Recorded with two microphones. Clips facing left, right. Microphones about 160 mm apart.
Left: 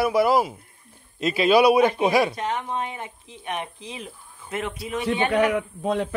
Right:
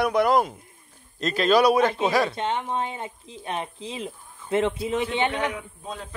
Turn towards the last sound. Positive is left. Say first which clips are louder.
# left 12 dB
turn(degrees=75)  # may be behind; listen again after turning